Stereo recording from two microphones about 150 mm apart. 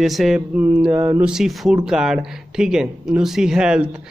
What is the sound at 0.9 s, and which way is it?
Speech, 15° right (ahead or behind).